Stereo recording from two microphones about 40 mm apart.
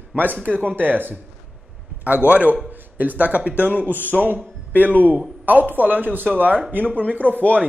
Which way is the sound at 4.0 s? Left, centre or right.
Left.